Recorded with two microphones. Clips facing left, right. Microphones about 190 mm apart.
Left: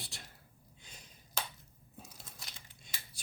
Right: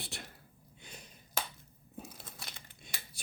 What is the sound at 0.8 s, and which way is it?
Finger snapping, 60° right (ahead or behind).